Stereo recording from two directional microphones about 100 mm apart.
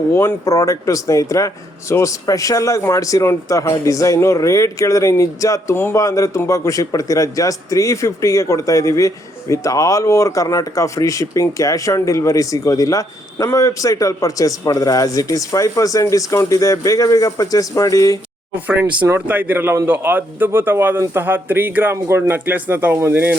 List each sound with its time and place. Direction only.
0.1 s a man's voice: 30° left (ahead or behind)
18.7 s speech: 15° right (ahead or behind)